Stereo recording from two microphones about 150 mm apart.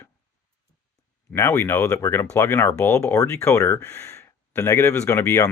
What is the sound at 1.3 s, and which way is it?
Speech, 15° left (ahead or behind).